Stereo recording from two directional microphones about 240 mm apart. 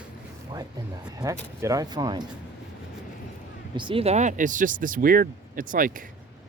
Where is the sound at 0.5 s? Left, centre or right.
Centre.